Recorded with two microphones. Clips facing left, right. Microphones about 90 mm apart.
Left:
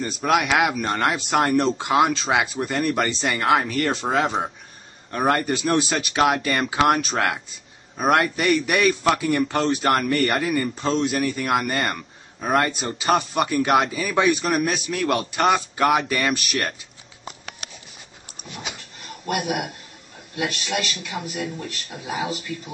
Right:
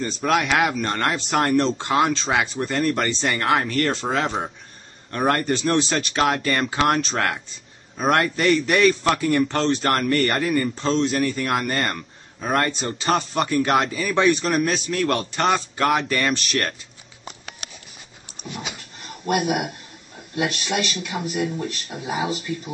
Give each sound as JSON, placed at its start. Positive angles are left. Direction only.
{"t": 0.0, "sound": "a man's voice", "side_deg": 5}
{"t": 19.2, "sound": "speech", "side_deg": -10}
{"t": 20.7, "sound": "speech", "side_deg": -10}
{"t": 21.2, "sound": "speech", "side_deg": -20}